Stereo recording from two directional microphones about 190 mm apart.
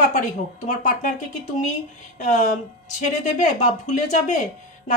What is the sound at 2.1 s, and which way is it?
A woman's voice, 40° left (ahead or behind).